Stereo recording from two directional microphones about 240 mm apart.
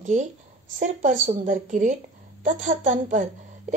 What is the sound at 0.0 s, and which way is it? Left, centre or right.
A woman's voice, right.